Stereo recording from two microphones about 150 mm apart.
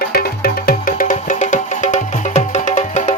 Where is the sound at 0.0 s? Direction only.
90° left.